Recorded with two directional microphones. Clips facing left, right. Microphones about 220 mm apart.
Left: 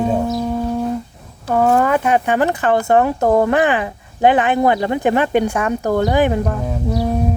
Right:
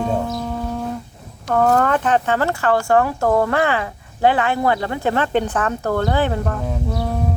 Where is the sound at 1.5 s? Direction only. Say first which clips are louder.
Left 2 dB; 10° left (ahead or behind).